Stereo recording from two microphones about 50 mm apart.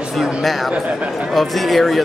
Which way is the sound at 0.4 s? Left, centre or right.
Centre.